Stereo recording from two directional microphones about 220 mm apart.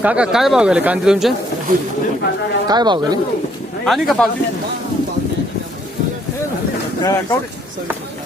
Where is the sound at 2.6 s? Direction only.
20° right (ahead or behind).